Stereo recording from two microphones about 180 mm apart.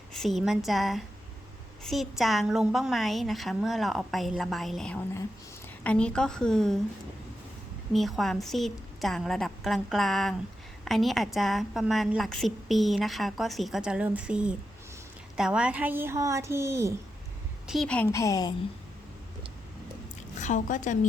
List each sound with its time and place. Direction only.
0.1 s a woman's voice: centre (ahead or behind)
7.9 s a woman's voice: centre (ahead or behind); by 16.9 s 15° right (ahead or behind)
17.7 s a woman's voice: 5° left (ahead or behind); by 18.5 s 20° left (ahead or behind)
20.4 s speech: 45° left (ahead or behind)